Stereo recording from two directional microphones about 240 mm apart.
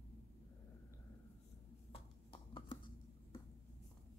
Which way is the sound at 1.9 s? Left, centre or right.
Left.